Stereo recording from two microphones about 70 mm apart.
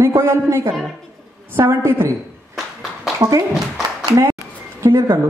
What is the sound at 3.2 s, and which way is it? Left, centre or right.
A woman's voice, right.